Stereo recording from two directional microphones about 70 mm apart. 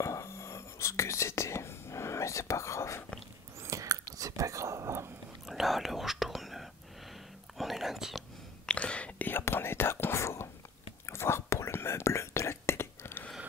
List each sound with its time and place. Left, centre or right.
0.0 s whispering: left
3.5 s whispering: right
5.5 s whispering: centre
8.6 s whispering: centre
9.3 s whispering: left